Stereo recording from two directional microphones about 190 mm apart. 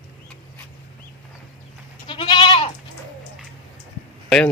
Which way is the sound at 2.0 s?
25° left (ahead or behind).